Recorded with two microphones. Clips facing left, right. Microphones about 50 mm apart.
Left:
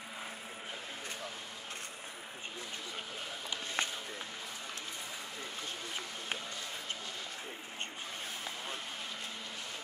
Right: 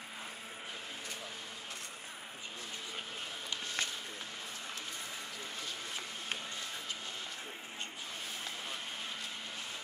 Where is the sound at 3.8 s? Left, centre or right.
Left.